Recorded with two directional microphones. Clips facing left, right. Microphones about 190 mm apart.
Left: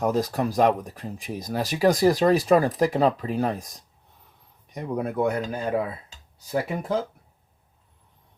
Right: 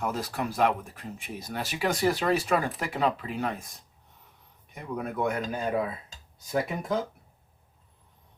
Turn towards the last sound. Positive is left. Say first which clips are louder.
# left 2 dB
turn(degrees=30)  # may be behind; listen again after turning